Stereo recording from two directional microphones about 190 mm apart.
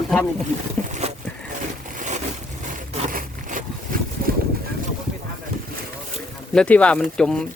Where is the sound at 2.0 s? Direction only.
40° right (ahead or behind).